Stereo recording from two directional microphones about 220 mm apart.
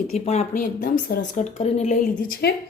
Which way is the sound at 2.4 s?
45° left (ahead or behind).